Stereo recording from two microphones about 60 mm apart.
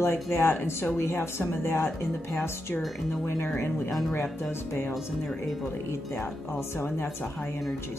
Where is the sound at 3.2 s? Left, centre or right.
Left.